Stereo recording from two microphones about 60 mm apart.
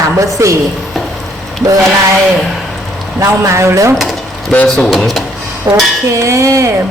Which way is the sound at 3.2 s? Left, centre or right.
Right.